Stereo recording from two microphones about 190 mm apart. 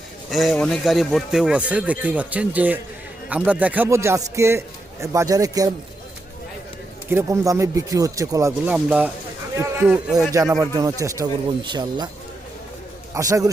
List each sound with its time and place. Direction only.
0.3 s a man's voice: centre (ahead or behind); by 5.7 s 20° right (ahead or behind)
7.1 s a man's voice: 15° right (ahead or behind)
10.3 s a man's voice: 15° right (ahead or behind)
13.1 s a man's voice: 15° right (ahead or behind)